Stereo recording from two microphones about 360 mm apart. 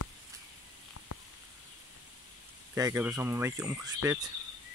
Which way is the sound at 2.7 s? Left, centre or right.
Centre.